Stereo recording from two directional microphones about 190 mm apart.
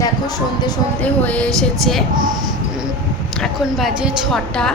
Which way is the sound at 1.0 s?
5° left (ahead or behind).